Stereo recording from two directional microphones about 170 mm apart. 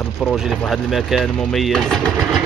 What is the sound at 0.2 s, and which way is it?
Speech, centre (ahead or behind).